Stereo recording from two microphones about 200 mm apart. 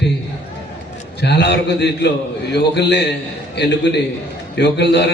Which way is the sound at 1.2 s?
60° left (ahead or behind).